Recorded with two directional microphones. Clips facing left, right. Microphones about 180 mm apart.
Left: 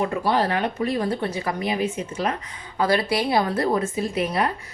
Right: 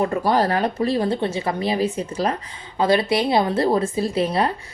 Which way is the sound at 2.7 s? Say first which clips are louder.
Right 3 dB; 25° right (ahead or behind).